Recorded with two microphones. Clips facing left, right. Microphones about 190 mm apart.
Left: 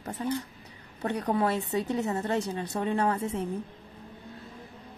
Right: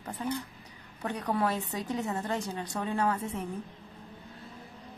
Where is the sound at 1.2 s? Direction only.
35° left (ahead or behind).